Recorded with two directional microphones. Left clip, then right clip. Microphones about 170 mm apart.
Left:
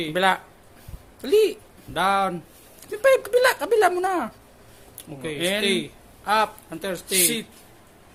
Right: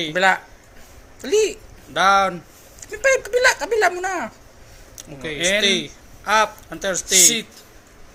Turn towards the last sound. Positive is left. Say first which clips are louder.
# right 7 dB
turn(degrees=20)  # may be behind; listen again after turning